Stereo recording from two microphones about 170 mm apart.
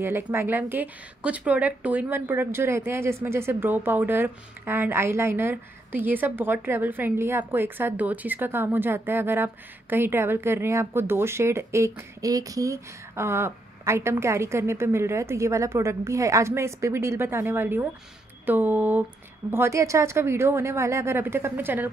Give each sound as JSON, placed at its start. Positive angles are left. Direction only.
{"t": 0.0, "sound": "a woman's voice", "side_deg": -15}